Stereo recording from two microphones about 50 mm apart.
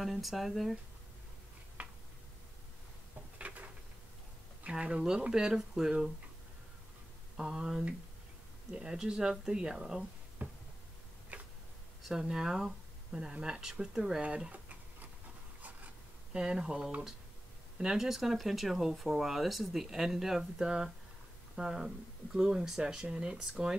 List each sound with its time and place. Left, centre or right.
0.0 s speech: centre
1.8 s a sound: right
3.3 s a sound: right
4.6 s speech: centre
7.3 s speech: centre
10.4 s a sound: right
11.3 s tick-tock: right
12.1 s speech: centre
14.2 s tick-tock: right
16.3 s speech: centre